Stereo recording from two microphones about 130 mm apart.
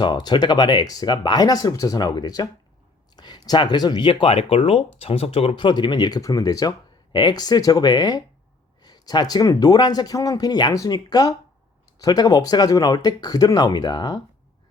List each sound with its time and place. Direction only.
0.0 s speech: 35° left (ahead or behind)